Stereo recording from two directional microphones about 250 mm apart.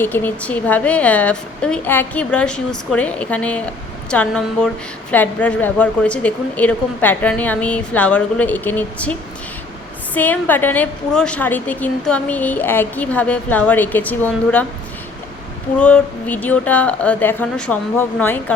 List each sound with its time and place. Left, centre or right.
0.0 s a woman's voice: centre
10.2 s a woman's voice: centre
15.8 s a woman's voice: centre